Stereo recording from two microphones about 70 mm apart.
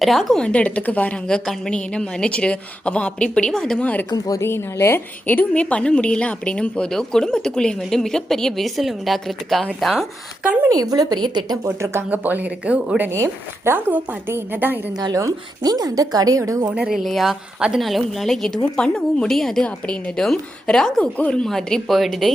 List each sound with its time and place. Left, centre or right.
0.0 s a woman's voice: centre
0.4 s a woman's voice: centre
4.4 s a woman's voice: left; by 10.1 s centre
10.7 s a woman's voice: right
11.6 s speech: right
12.1 s speech: right
13.1 s speech: right
13.7 s speech: right
15.1 s a woman's voice: right
16.8 s a woman's voice: centre
19.6 s a woman's voice: centre